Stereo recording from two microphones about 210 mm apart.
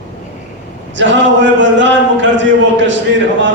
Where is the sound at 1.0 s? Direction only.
60° right (ahead or behind).